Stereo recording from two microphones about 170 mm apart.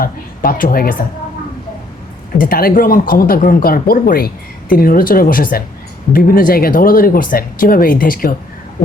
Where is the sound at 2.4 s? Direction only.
60° left (ahead or behind).